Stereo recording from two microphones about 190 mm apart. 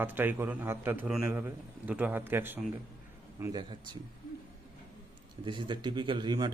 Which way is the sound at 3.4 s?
20° right (ahead or behind).